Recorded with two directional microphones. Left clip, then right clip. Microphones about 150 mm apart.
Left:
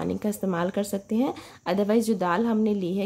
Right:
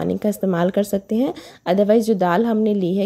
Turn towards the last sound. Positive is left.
turn(degrees=-40)  # may be behind; listen again after turning